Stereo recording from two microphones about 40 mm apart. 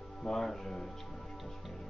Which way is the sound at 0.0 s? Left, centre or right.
Centre.